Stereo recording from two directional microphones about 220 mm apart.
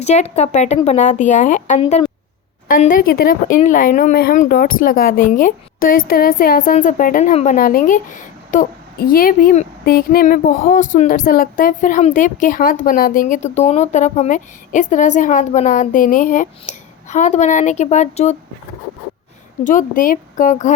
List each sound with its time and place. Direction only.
0.0 s a woman's voice: 30° left (ahead or behind)
19.6 s a woman's voice: 35° left (ahead or behind)